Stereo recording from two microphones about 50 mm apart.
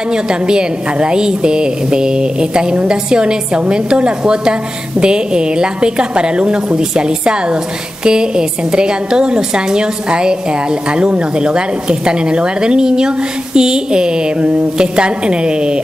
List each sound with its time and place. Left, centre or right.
0.1 s a woman's voice: centre